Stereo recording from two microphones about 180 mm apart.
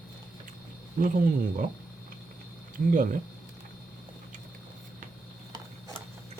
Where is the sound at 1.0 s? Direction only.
50° right (ahead or behind).